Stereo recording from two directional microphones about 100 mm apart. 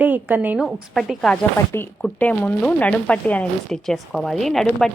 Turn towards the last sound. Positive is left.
turn(degrees=5)  # may be behind; listen again after turning